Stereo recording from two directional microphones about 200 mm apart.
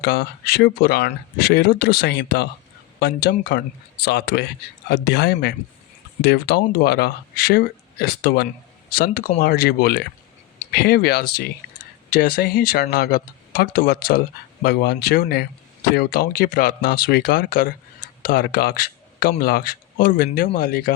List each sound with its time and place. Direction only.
0.0 s speech: 55° left (ahead or behind)